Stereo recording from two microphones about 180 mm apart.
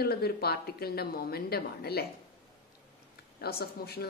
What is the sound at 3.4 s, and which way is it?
Speech, 60° left (ahead or behind).